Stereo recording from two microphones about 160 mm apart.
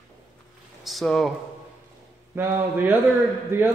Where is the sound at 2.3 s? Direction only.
10° right (ahead or behind).